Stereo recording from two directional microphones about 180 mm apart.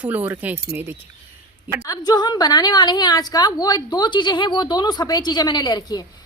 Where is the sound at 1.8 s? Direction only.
20° left (ahead or behind).